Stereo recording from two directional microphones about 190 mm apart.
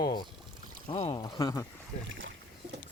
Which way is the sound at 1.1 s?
20° left (ahead or behind).